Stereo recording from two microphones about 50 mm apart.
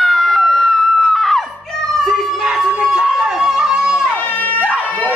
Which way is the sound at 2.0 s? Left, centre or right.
Centre.